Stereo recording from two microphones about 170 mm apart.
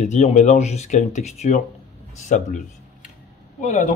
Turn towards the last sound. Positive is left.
turn(degrees=50)  # may be behind; listen again after turning